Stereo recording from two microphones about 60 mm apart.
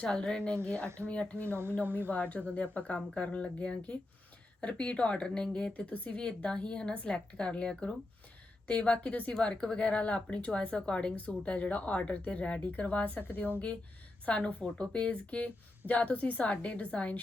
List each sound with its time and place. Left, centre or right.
0.0 s speech: centre; by 13.5 s left
14.3 s speech: centre